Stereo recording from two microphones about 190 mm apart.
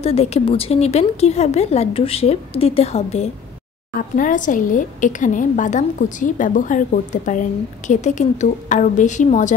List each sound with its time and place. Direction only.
0.0 s a woman's voice: 35° left (ahead or behind)